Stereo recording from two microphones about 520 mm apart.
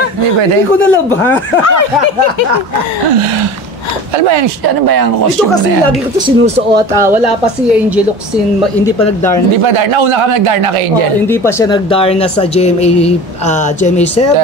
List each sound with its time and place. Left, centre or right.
0.7 s speech: centre
4.8 s speech: right
6.1 s speech: centre
9.0 s speech: centre
9.6 s a man's voice: right
11.2 s speech: centre